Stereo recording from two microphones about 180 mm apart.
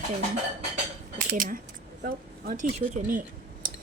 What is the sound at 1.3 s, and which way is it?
Speech, 50° right (ahead or behind).